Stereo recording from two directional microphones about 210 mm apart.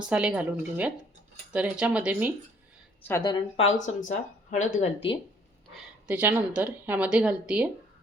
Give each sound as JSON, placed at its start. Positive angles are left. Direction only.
{"t": 0.0, "sound": "speech", "side_deg": -5}
{"t": 3.0, "sound": "a woman's voice", "side_deg": 15}
{"t": 3.6, "sound": "speech", "side_deg": 35}
{"t": 5.7, "sound": "a woman's voice", "side_deg": -10}